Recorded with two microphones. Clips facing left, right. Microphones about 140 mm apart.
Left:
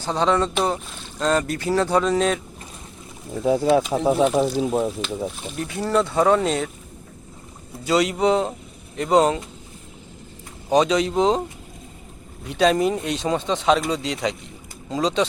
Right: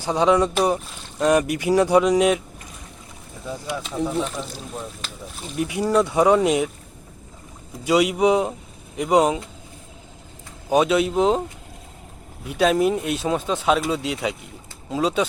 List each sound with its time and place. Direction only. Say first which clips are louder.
0.0 s speech: right 2 dB; 10° right (ahead or behind)
3.4 s speech: left 12 dB; 75° left (ahead or behind)
4.6 s speech: left 12 dB; 90° left
5.5 s speech: right 2 dB; 15° right (ahead or behind)
7.9 s speech: right 1 dB; 10° right (ahead or behind)
10.7 s speech: even; 10° right (ahead or behind)
12.5 s speech: even; 5° right (ahead or behind)